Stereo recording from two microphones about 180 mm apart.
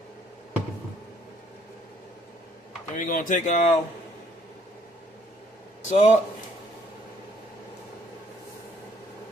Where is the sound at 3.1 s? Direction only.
45° left (ahead or behind).